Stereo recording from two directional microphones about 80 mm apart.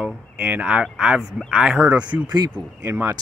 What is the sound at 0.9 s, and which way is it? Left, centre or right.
Speech, centre.